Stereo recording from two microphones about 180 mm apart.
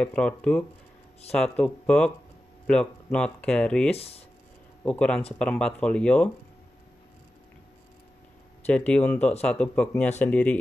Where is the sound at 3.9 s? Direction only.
35° left (ahead or behind).